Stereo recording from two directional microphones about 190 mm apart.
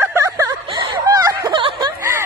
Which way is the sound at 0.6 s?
25° right (ahead or behind).